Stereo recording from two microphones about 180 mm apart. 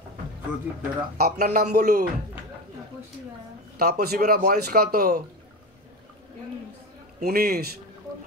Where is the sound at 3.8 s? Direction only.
60° right (ahead or behind).